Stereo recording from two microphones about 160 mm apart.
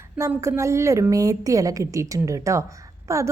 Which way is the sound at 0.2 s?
20° right (ahead or behind).